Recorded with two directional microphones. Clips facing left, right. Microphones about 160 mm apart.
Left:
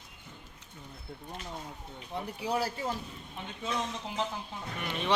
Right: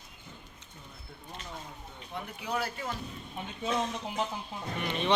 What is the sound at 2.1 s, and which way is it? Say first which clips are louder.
Speech: left 3 dB; 35° left (ahead or behind).